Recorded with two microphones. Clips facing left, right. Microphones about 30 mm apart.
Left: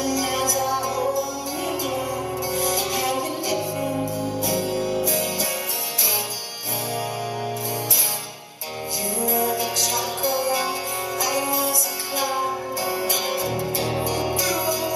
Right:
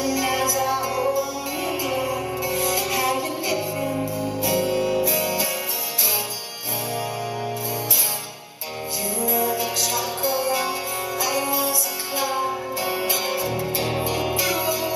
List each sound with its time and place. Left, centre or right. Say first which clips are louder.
0.0 s music: right 1 dB; centre
9.2 s music: even; centre
12.8 s music: right 1 dB; right
13.1 s music: even; centre
14.3 s music: even; right